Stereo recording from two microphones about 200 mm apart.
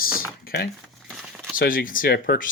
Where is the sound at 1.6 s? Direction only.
45° left (ahead or behind).